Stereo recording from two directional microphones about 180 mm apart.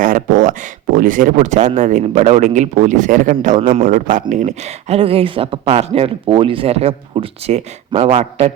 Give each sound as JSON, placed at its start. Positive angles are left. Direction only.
{"t": 0.0, "sound": "speech", "side_deg": -50}